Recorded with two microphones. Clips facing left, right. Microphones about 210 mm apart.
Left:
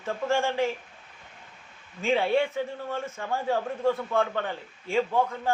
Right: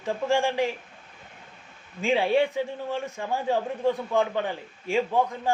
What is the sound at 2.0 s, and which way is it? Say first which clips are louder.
Speech: right 2 dB; 15° right (ahead or behind).